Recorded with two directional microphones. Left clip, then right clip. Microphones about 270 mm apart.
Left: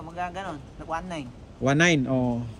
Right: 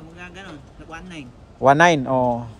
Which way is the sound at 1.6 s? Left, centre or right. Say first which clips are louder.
Right 8 dB; centre.